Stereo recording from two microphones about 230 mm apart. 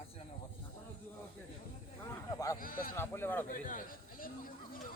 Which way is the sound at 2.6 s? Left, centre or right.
Left.